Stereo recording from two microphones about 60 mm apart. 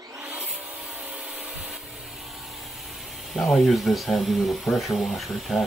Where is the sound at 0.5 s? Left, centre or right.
Centre.